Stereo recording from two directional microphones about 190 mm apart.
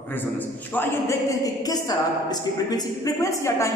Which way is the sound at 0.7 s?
10° left (ahead or behind).